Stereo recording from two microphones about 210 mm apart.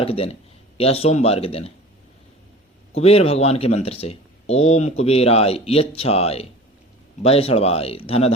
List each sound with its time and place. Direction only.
0.0 s speech: 30° left (ahead or behind)
2.9 s speech: 30° left (ahead or behind)